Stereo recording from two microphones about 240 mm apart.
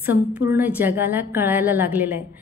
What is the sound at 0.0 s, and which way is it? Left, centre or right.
A woman's voice, centre.